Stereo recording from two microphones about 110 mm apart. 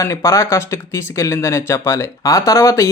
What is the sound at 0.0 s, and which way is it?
Speech, 25° left (ahead or behind).